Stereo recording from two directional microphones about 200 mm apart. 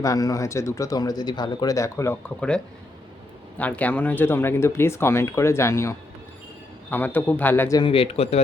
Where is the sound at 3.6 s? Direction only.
10° left (ahead or behind).